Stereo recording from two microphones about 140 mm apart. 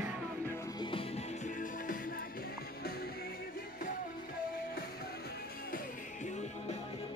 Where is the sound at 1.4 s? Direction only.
70° left (ahead or behind).